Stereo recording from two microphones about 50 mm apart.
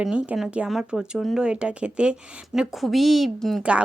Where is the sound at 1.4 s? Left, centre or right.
Centre.